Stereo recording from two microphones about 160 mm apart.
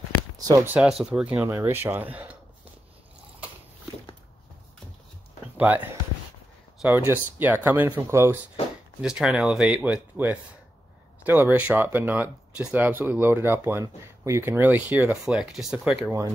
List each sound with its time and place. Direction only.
0.7 s speech: 5° right (ahead or behind)
1.4 s speech: 15° right (ahead or behind)
5.6 s speech: 10° right (ahead or behind)
9.0 s speech: 5° right (ahead or behind)